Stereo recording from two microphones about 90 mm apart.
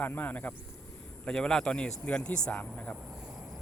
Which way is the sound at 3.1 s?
10° right (ahead or behind).